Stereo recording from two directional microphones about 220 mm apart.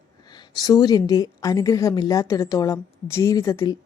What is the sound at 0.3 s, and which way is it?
A woman's voice, 20° left (ahead or behind).